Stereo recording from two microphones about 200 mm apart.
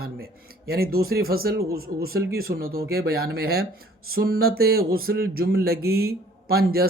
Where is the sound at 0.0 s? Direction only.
50° right (ahead or behind).